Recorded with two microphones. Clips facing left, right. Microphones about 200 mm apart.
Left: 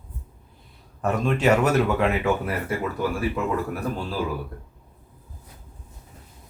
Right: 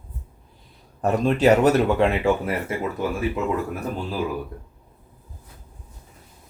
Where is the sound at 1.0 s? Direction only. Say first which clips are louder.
Right 3 dB; 35° right (ahead or behind).